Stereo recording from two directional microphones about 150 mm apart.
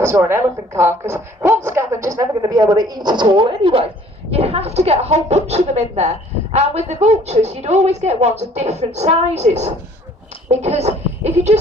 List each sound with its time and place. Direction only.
0.0 s a woman's voice: 15° right (ahead or behind); by 11.6 s 50° right (ahead or behind)